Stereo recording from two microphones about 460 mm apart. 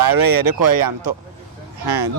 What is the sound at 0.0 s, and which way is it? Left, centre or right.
Speech, right.